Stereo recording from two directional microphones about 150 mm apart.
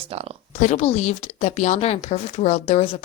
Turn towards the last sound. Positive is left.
turn(degrees=45)  # may be behind; listen again after turning